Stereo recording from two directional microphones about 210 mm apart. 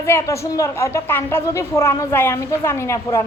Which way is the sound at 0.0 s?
15° left (ahead or behind).